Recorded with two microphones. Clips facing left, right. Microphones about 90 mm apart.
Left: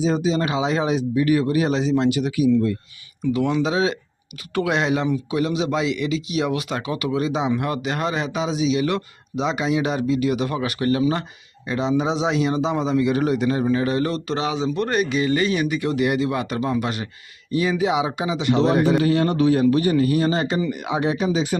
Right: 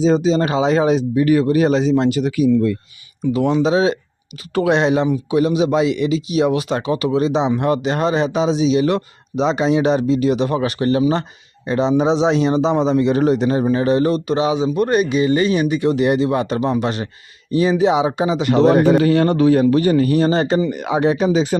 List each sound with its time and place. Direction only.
0.0 s speech: 35° right (ahead or behind)
3.3 s a man's voice: 25° right (ahead or behind)